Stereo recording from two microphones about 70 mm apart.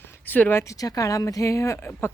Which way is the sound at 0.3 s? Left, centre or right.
Left.